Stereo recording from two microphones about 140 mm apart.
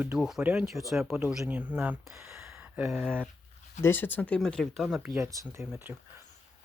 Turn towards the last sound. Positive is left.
turn(degrees=-10)  # may be behind; listen again after turning